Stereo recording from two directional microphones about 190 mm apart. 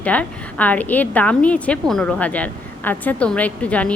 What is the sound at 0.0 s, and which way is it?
A woman's voice, 5° left (ahead or behind).